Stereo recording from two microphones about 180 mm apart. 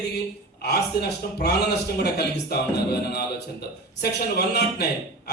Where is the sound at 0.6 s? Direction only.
60° left (ahead or behind).